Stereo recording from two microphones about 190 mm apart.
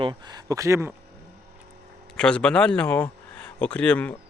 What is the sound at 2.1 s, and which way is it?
Speech, 5° left (ahead or behind).